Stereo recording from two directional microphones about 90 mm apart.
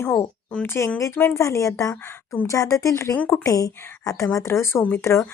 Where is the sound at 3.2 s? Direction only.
15° left (ahead or behind).